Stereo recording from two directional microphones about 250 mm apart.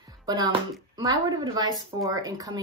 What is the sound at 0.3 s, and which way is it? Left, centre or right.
Speech, centre.